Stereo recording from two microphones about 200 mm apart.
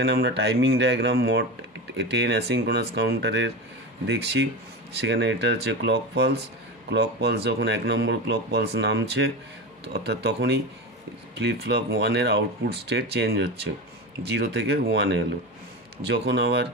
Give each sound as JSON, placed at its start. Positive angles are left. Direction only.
{"t": 0.0, "sound": "speech", "side_deg": -55}